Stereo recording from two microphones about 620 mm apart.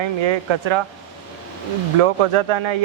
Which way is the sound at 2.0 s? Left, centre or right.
Right.